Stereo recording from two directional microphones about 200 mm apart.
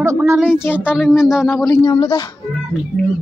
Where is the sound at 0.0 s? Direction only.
15° right (ahead or behind).